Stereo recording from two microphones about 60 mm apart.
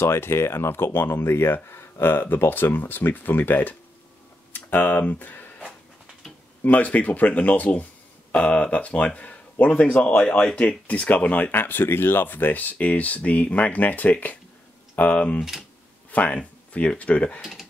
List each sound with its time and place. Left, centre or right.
0.0 s speech: left
6.6 s speech: left
17.4 s speech: centre